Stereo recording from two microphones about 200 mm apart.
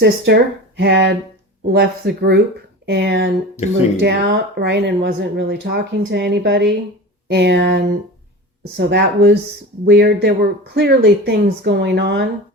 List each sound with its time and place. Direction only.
0.0 s speech: 55° right (ahead or behind)